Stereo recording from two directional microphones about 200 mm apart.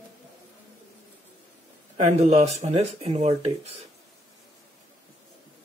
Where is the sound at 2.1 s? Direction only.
35° right (ahead or behind).